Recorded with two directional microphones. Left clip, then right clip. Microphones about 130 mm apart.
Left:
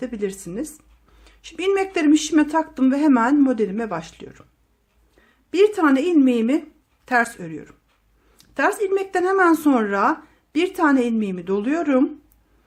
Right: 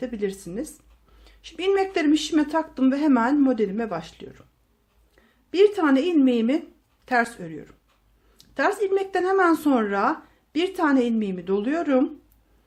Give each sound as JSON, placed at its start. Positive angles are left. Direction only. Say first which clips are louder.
{"t": 0.0, "sound": "speech", "louder": "left 2 dB", "side_deg": 25}
{"t": 5.5, "sound": "speech", "louder": "left 2 dB", "side_deg": 25}